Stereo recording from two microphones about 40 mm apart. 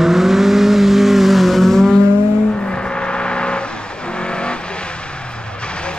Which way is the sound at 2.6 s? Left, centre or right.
Left.